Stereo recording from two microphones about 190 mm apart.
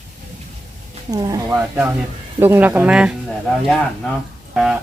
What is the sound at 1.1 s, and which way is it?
Speech, 20° right (ahead or behind).